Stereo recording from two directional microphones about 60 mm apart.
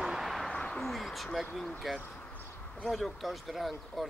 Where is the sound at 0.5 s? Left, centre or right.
Centre.